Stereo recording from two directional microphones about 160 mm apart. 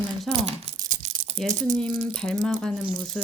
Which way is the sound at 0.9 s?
50° right (ahead or behind).